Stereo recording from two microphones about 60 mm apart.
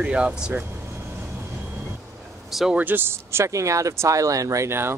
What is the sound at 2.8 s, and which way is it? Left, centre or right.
Speech, right.